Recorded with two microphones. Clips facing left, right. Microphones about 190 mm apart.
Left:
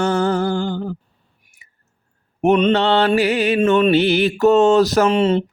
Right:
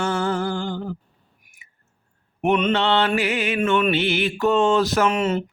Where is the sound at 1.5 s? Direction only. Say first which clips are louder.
Even; 30° left (ahead or behind).